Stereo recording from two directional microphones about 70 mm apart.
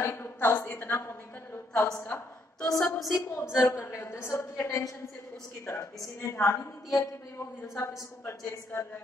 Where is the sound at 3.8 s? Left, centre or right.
Left.